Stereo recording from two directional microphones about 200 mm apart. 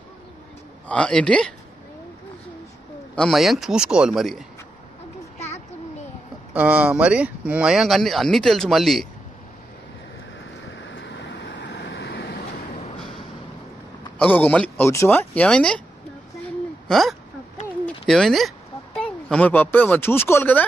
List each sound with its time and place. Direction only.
0.8 s speech: 5° left (ahead or behind)
3.2 s speech: centre (ahead or behind)
5.4 s a sound: 35° left (ahead or behind)
6.5 s speech: 5° right (ahead or behind)
10.8 s vehicle: 65° left (ahead or behind)
14.1 s speech: 10° left (ahead or behind)
16.8 s speech: centre (ahead or behind)